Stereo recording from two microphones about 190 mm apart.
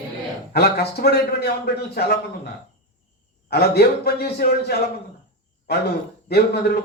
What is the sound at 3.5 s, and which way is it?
Speech, 55° left (ahead or behind).